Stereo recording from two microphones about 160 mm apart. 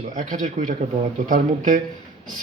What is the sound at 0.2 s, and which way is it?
Speech, 55° right (ahead or behind).